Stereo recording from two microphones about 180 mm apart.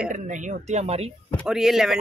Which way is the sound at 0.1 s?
45° right (ahead or behind).